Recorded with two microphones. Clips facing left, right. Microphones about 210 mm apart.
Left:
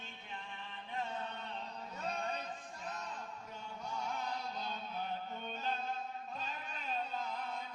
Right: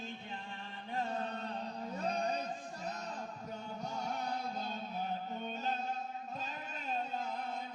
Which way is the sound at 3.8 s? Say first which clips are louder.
Right 1 dB; 40° right (ahead or behind).